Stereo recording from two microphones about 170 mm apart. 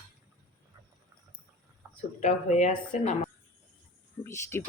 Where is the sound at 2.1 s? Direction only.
45° left (ahead or behind).